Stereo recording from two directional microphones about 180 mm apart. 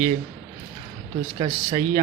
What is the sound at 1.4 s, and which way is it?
Speech, 25° right (ahead or behind).